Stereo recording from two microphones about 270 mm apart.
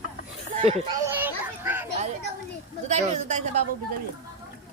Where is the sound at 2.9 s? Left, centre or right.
Right.